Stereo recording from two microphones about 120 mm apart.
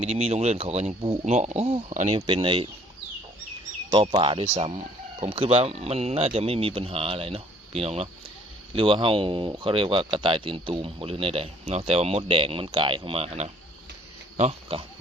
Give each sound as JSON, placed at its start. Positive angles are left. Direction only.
{"t": 0.0, "sound": "speech", "side_deg": -60}
{"t": 2.1, "sound": "speech", "side_deg": -50}
{"t": 3.9, "sound": "speech", "side_deg": -45}
{"t": 4.5, "sound": "speech", "side_deg": -55}